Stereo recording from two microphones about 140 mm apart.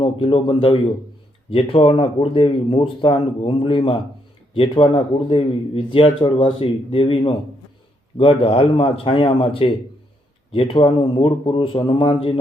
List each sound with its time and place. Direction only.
0.0 s speech: 40° left (ahead or behind)